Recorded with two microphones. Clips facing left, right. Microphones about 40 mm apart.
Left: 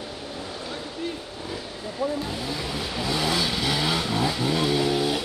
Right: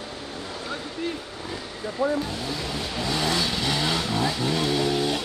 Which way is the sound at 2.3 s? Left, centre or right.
Centre.